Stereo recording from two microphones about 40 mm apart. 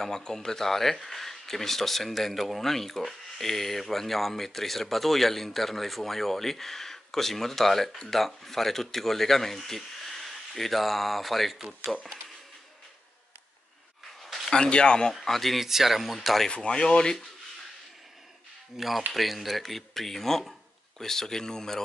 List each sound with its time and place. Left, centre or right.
0.0 s speech: centre
14.2 s a sound: centre
14.5 s speech: left
15.1 s speech: centre
16.4 s speech: left
18.8 s speech: centre